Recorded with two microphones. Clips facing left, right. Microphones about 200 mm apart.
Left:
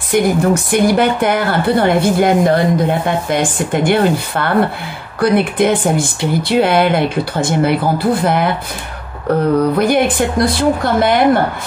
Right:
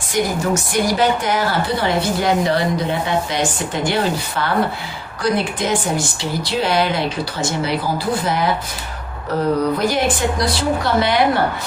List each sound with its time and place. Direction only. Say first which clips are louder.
0.1 s speech: left 6 dB; 55° left (ahead or behind)